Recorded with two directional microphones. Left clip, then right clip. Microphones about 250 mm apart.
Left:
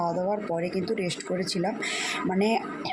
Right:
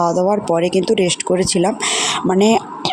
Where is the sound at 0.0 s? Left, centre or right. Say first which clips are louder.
Right 12 dB; right.